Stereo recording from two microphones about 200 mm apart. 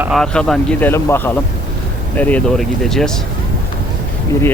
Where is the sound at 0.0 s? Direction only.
Centre (ahead or behind).